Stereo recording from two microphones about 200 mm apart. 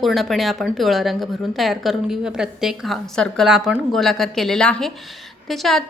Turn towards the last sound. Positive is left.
turn(degrees=0)  # may be behind; listen again after turning